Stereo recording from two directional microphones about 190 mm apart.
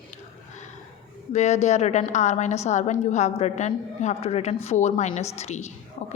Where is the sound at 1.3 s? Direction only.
35° left (ahead or behind).